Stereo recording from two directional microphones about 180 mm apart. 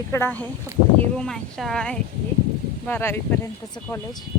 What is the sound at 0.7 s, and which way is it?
Speech, 15° right (ahead or behind).